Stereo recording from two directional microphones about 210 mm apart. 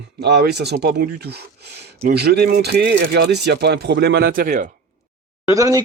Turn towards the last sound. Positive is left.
turn(degrees=-15)  # may be behind; listen again after turning